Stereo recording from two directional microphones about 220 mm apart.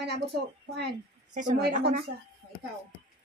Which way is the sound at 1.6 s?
45° right (ahead or behind).